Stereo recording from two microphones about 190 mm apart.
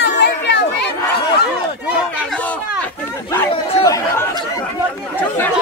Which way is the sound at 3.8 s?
15° left (ahead or behind).